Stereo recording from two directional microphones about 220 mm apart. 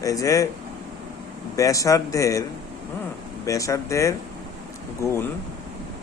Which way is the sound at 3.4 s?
15° left (ahead or behind).